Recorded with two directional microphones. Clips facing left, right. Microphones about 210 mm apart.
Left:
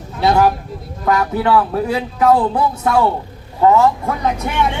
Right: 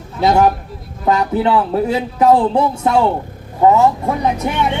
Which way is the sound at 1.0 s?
25° right (ahead or behind).